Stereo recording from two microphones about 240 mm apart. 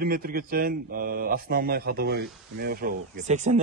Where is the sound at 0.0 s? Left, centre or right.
Right.